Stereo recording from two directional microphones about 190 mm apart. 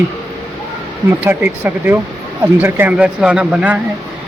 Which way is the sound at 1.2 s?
10° right (ahead or behind).